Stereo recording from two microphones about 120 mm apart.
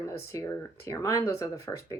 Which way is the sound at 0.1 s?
25° left (ahead or behind).